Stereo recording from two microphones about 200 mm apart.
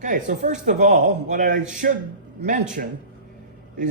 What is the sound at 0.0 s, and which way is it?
A man's voice, 40° right (ahead or behind).